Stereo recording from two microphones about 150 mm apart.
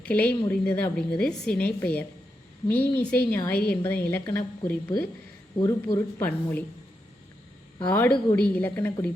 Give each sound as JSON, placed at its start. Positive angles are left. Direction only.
{"t": 0.0, "sound": "a woman's voice", "side_deg": 10}
{"t": 5.5, "sound": "speech", "side_deg": 25}
{"t": 6.2, "sound": "a woman's voice", "side_deg": 10}
{"t": 7.9, "sound": "a woman's voice", "side_deg": 10}